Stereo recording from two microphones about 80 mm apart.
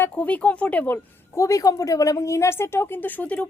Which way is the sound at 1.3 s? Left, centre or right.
Left.